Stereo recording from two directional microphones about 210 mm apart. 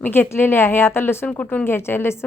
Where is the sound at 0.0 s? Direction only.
10° left (ahead or behind).